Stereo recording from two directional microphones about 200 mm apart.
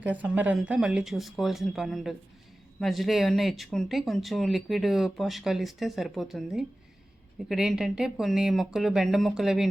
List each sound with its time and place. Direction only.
0.0 s speech: 10° right (ahead or behind)